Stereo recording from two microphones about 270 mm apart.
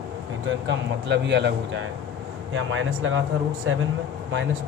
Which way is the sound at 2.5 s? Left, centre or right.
Right.